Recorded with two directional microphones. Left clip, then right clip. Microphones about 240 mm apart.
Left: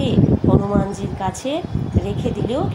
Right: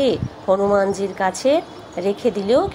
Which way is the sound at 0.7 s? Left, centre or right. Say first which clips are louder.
Right 5 dB; centre.